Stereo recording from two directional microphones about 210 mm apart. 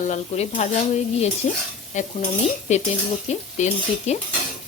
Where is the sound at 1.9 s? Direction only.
35° left (ahead or behind).